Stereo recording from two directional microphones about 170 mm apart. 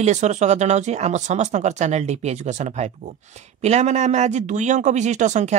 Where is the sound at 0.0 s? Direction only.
45° right (ahead or behind).